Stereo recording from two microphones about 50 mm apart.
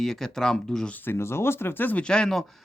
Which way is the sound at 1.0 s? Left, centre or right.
Left.